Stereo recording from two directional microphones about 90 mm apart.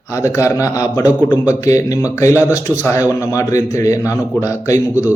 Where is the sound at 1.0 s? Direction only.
15° right (ahead or behind).